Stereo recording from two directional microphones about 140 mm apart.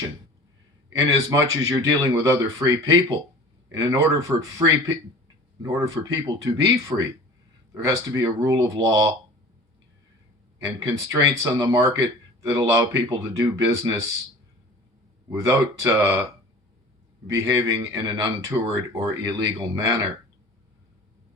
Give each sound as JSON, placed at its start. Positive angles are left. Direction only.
{"t": 0.9, "sound": "speech", "side_deg": -25}
{"t": 10.8, "sound": "speech", "side_deg": -25}
{"t": 15.4, "sound": "speech", "side_deg": -25}
{"t": 17.2, "sound": "speech", "side_deg": -25}